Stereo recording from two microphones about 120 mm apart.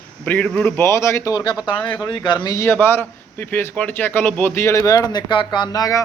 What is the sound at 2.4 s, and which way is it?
A man's voice, 25° left (ahead or behind).